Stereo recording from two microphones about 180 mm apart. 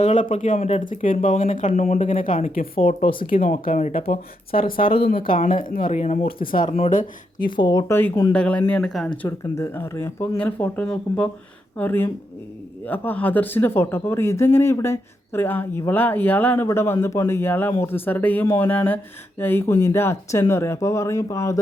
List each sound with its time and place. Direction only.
0.0 s speech: 45° left (ahead or behind)
6.7 s speech: 35° left (ahead or behind); by 9.0 s centre (ahead or behind)
9.2 s speech: 15° left (ahead or behind)